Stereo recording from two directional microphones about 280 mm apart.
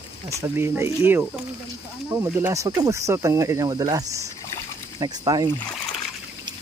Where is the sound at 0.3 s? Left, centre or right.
Centre.